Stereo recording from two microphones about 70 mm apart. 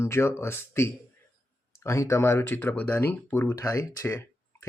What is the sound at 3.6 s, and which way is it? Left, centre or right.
Speech, left.